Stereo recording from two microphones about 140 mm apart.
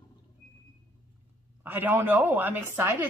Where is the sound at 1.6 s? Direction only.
10° right (ahead or behind).